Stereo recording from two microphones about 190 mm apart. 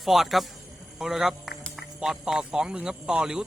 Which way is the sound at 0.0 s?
Centre (ahead or behind).